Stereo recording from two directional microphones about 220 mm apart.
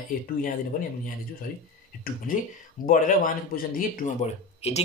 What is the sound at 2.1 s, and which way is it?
Speech, 40° left (ahead or behind).